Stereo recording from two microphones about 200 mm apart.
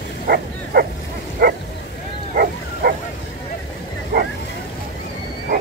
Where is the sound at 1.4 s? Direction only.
50° right (ahead or behind).